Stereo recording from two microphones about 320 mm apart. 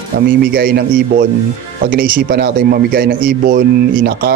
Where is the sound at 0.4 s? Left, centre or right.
Right.